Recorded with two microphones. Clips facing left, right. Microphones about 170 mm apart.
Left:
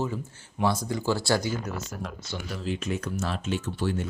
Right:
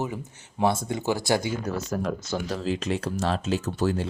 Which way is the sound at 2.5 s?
90° right.